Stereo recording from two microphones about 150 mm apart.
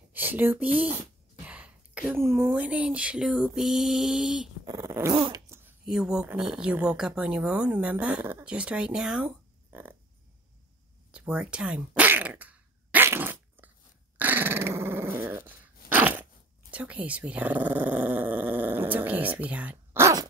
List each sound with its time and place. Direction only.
0.1 s speech: 10° right (ahead or behind)
4.6 s dog: 20° right (ahead or behind)
5.1 s dog: 35° right (ahead or behind)
5.9 s speech: 5° right (ahead or behind)
9.7 s a sound: 15° right (ahead or behind)
11.1 s a sound: 5° right (ahead or behind)
14.1 s dog: 10° right (ahead or behind)
16.7 s speech: 10° right (ahead or behind)